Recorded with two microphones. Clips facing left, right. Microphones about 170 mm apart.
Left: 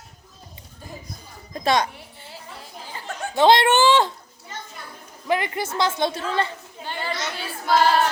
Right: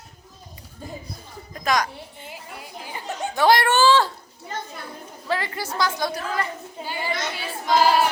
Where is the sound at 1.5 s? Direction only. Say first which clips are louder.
Left 2 dB; 30° left (ahead or behind).